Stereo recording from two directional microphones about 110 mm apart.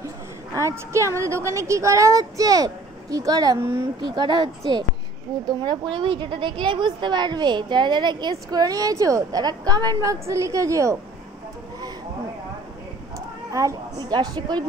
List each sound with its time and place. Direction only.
0.6 s a woman's voice: 25° right (ahead or behind)
13.5 s a woman's voice: 30° right (ahead or behind)